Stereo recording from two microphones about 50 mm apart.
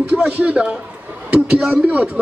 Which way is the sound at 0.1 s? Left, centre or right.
Right.